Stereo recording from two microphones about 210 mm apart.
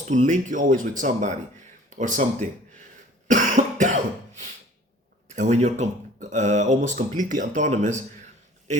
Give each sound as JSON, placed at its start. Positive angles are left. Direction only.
{"t": 0.1, "sound": "speech", "side_deg": -35}
{"t": 3.2, "sound": "cough", "side_deg": -35}
{"t": 5.3, "sound": "speech", "side_deg": -35}